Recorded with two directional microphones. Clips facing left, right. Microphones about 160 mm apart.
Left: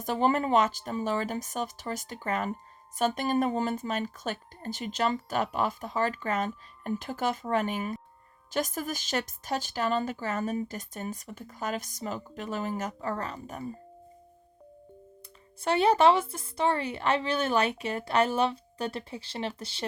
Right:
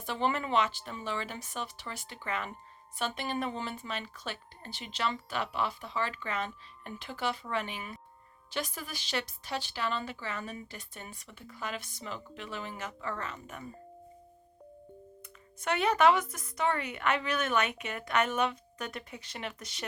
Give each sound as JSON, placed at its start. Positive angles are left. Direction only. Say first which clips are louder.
{"t": 0.0, "sound": "speech", "louder": "left 6 dB", "side_deg": 40}
{"t": 15.6, "sound": "speech", "louder": "left 4 dB", "side_deg": 30}